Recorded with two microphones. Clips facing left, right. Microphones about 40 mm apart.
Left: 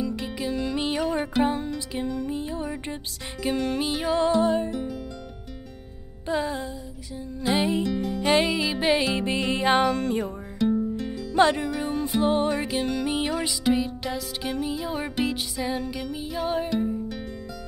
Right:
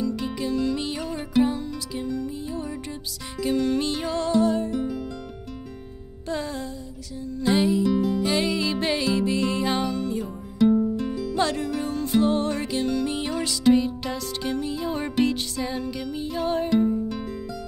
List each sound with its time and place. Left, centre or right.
0.0 s music: centre
1.4 s music: left; by 4.2 s centre
4.2 s music: centre
4.6 s music: centre
6.2 s music: centre
8.2 s music: left
8.5 s music: centre
8.9 s music: left
10.6 s music: centre
11.3 s music: left; by 17.2 s centre